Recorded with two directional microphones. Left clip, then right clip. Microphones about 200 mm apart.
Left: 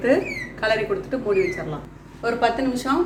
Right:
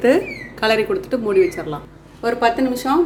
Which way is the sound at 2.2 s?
45° right (ahead or behind).